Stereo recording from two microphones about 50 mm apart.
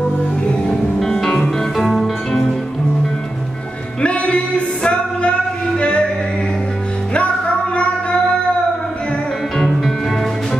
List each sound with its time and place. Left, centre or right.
0.5 s music: centre
4.0 s music: left
7.7 s music: left